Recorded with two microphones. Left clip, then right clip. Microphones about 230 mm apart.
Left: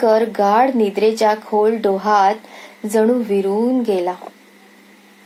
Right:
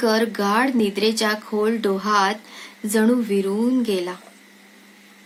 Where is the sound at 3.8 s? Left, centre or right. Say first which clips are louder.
Left 5 dB; centre.